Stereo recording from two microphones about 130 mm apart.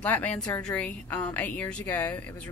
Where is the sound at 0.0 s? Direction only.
10° left (ahead or behind).